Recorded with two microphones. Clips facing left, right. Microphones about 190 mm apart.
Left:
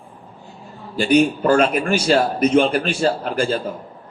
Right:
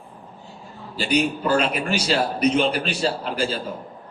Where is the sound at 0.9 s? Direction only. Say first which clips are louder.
Left 6 dB; 50° left (ahead or behind).